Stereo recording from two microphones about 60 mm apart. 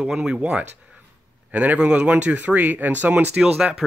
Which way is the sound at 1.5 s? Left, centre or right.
Right.